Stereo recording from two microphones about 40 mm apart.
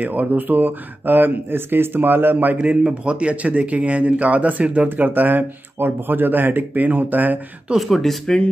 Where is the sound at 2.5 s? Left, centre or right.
Right.